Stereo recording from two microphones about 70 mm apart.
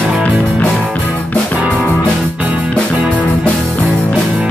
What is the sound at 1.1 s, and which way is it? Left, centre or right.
Music, left.